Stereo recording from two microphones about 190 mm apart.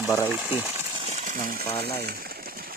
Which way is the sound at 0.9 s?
35° right (ahead or behind).